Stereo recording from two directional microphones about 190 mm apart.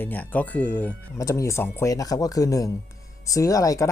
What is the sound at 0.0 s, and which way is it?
Speech, 10° left (ahead or behind).